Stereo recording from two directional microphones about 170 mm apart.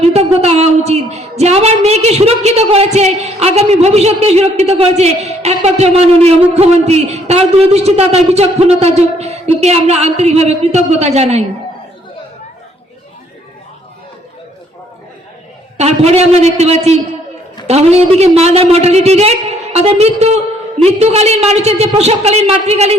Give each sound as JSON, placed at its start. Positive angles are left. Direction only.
{"t": 0.0, "sound": "a woman's voice", "side_deg": -40}
{"t": 15.8, "sound": "a woman's voice", "side_deg": -40}